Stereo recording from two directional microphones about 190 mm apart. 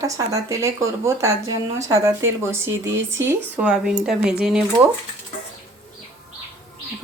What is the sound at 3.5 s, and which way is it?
Speech, 5° right (ahead or behind).